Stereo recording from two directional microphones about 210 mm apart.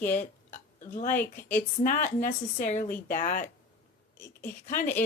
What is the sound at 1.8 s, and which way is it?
Speech, 40° left (ahead or behind).